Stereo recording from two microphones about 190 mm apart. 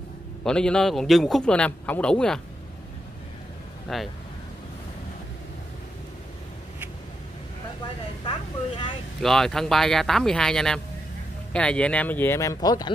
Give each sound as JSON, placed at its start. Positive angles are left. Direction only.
{"t": 0.4, "sound": "a man's voice", "side_deg": 5}
{"t": 3.9, "sound": "a man's voice", "side_deg": 0}
{"t": 8.3, "sound": "speech", "side_deg": 25}
{"t": 9.2, "sound": "a man's voice", "side_deg": 0}